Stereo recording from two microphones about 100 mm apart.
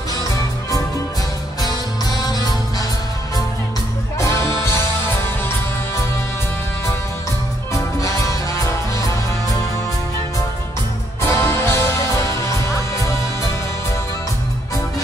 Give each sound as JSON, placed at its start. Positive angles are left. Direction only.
{"t": 4.2, "sound": "music", "side_deg": 30}
{"t": 7.7, "sound": "music", "side_deg": 35}
{"t": 11.2, "sound": "music", "side_deg": 25}